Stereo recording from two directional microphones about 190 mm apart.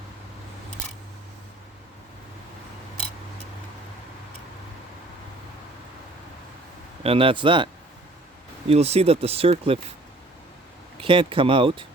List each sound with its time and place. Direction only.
7.0 s speech: 30° right (ahead or behind)
11.0 s speech: 25° right (ahead or behind)